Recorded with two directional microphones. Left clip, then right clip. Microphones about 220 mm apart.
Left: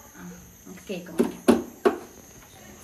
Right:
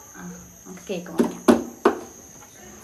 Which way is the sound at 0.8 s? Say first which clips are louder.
Right 3 dB; 20° right (ahead or behind).